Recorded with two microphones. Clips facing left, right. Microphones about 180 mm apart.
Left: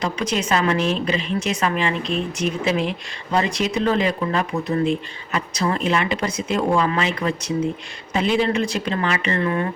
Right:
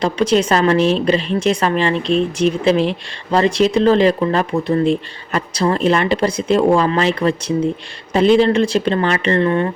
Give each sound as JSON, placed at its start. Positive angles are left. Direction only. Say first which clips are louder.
{"t": 0.0, "sound": "speech", "louder": "right 8 dB", "side_deg": -30}